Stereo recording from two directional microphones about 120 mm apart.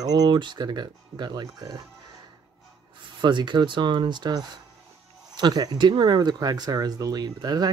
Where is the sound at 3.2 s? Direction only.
40° right (ahead or behind).